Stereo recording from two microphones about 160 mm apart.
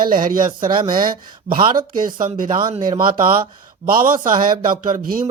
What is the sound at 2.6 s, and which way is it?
Speech, 30° right (ahead or behind).